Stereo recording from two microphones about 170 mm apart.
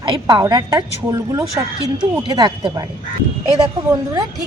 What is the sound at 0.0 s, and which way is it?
A woman's voice, 25° right (ahead or behind).